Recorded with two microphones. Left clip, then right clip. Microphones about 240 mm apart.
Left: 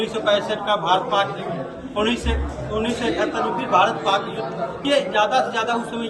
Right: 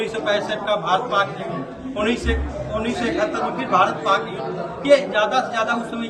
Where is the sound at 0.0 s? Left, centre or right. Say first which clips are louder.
Left 1 dB; centre.